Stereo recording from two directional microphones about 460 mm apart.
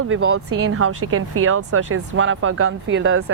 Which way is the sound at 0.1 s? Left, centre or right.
Right.